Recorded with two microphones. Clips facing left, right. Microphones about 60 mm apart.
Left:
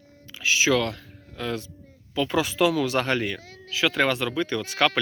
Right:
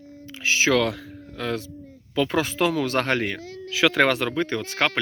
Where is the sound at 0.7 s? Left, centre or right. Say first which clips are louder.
Right 2 dB; right.